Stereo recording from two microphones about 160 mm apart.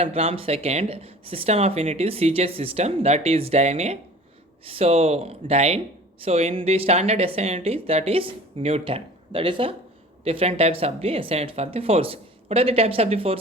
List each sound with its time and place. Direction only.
0.0 s speech: 40° right (ahead or behind)